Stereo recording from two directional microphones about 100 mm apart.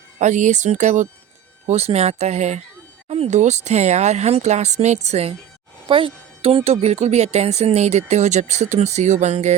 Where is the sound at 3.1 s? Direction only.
90° right.